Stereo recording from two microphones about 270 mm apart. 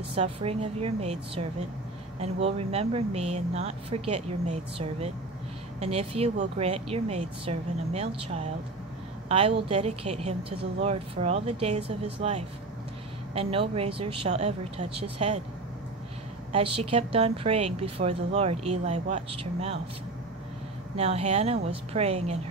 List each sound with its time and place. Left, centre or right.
0.1 s speech: right
16.5 s speech: right
20.9 s speech: right